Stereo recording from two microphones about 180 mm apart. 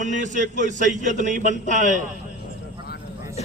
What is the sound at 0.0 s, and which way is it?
Speech, 45° right (ahead or behind).